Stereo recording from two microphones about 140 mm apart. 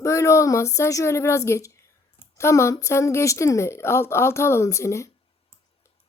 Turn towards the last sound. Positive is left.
turn(degrees=20)  # may be behind; listen again after turning